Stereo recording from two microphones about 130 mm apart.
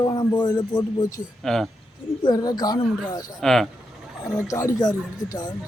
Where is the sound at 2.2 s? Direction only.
30° left (ahead or behind).